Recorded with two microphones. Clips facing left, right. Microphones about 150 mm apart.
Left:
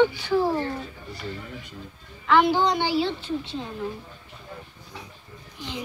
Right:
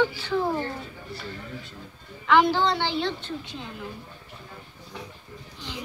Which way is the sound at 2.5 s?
15° left (ahead or behind).